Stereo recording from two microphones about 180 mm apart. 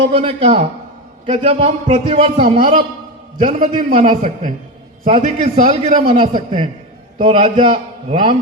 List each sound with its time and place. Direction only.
0.1 s a man's voice: 30° right (ahead or behind)
3.4 s a man's voice: 45° right (ahead or behind); by 8.4 s 30° right (ahead or behind)